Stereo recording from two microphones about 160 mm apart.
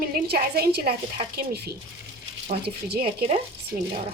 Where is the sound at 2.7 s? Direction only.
85° right.